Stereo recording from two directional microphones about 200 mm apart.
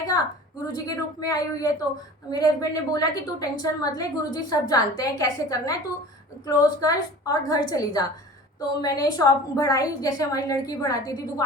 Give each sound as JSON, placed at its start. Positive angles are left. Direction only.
{"t": 0.7, "sound": "a woman's voice", "side_deg": 20}